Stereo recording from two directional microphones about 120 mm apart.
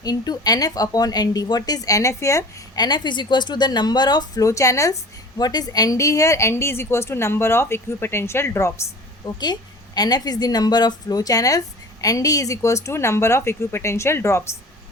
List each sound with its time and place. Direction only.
0.0 s a woman's voice: 35° left (ahead or behind)
9.4 s a woman's voice: 35° left (ahead or behind)